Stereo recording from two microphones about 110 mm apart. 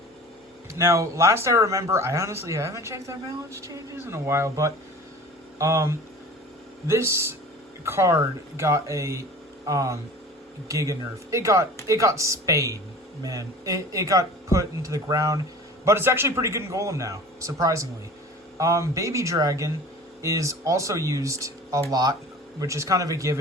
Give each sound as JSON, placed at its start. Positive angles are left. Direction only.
{"t": 0.7, "sound": "a man's voice", "side_deg": -25}